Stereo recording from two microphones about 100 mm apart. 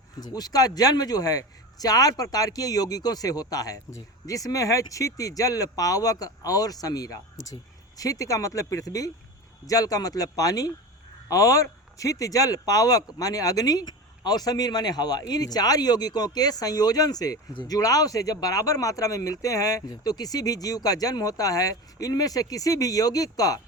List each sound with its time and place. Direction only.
0.2 s a man's voice: 40° left (ahead or behind)